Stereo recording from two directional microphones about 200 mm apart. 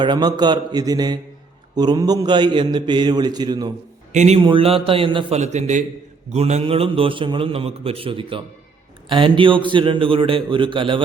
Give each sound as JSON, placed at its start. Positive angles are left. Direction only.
{"t": 0.0, "sound": "a man's voice", "side_deg": -20}
{"t": 4.1, "sound": "a man's voice", "side_deg": -35}